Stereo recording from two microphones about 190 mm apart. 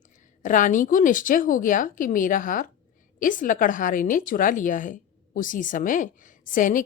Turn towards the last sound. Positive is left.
turn(degrees=45)  # may be behind; listen again after turning